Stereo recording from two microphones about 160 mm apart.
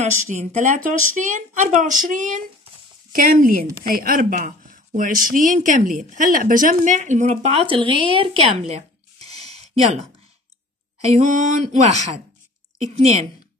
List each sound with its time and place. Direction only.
0.0 s speech: 45° right (ahead or behind)
9.4 s a sound: 40° right (ahead or behind)
11.1 s speech: 50° right (ahead or behind)